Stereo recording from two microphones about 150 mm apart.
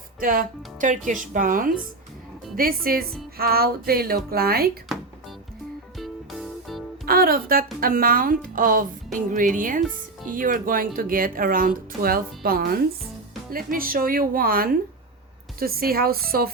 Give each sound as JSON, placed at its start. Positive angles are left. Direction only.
{"t": 0.2, "sound": "a woman's voice", "side_deg": -65}
{"t": 3.3, "sound": "speech", "side_deg": -90}
{"t": 6.0, "sound": "music", "side_deg": 0}
{"t": 7.0, "sound": "a woman's voice", "side_deg": -80}
{"t": 13.5, "sound": "a woman's voice", "side_deg": -70}